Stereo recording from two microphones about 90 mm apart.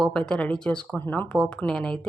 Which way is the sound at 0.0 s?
10° left (ahead or behind).